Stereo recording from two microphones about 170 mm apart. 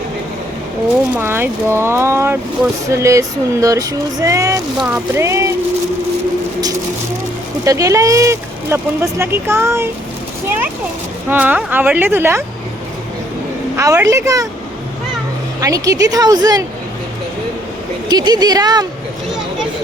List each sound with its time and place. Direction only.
1.1 s speech: 15° right (ahead or behind)
7.6 s speech: 20° right (ahead or behind)
11.3 s speech: 10° right (ahead or behind)
13.7 s speech: 15° right (ahead or behind)
15.6 s speech: 20° right (ahead or behind)
18.1 s speech: 25° right (ahead or behind)